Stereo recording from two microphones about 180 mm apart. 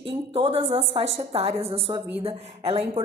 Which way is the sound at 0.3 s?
30° right (ahead or behind).